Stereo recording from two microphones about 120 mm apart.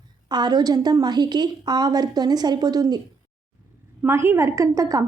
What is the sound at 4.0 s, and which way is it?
A woman's voice, 20° right (ahead or behind).